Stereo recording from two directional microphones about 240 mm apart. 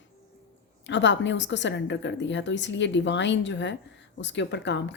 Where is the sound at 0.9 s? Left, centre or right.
Left.